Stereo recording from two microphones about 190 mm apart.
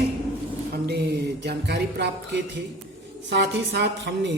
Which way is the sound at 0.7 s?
60° right (ahead or behind).